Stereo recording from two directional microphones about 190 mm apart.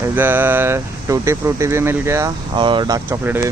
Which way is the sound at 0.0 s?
10° right (ahead or behind).